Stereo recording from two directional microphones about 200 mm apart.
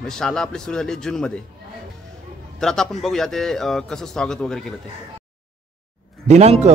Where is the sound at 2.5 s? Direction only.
Centre (ahead or behind).